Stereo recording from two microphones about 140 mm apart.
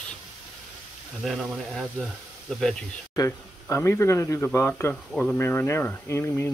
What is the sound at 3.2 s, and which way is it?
Speech, 20° left (ahead or behind).